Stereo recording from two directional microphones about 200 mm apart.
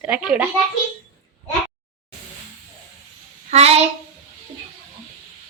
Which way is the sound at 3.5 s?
30° right (ahead or behind).